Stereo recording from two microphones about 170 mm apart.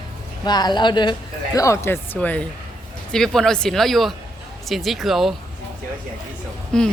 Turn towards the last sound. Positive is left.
turn(degrees=5)  # may be behind; listen again after turning